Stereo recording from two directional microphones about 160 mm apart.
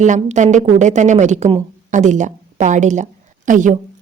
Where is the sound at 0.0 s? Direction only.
50° right (ahead or behind).